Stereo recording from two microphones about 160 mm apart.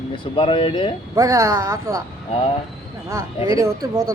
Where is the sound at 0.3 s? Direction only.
35° left (ahead or behind).